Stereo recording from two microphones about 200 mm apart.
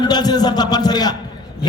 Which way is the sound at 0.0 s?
20° left (ahead or behind).